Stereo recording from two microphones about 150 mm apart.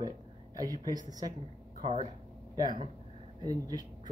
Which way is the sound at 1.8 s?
45° right (ahead or behind).